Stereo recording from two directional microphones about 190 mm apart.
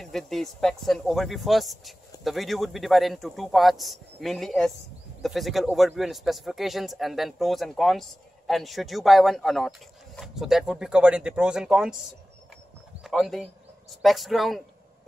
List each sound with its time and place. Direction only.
0.0 s a man's voice: centre (ahead or behind)
13.0 s a man's voice: centre (ahead or behind)